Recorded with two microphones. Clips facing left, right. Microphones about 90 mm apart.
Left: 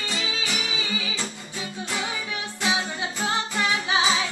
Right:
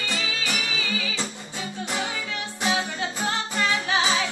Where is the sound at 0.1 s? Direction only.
20° left (ahead or behind).